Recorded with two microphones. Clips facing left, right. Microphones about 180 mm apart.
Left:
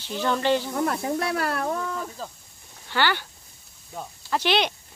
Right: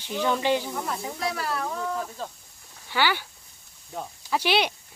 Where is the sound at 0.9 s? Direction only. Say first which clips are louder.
Left 5 dB; 60° left (ahead or behind).